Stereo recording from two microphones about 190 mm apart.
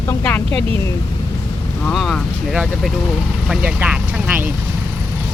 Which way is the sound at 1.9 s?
Centre (ahead or behind).